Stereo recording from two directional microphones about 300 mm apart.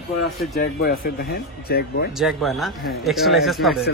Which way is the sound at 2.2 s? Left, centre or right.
Centre.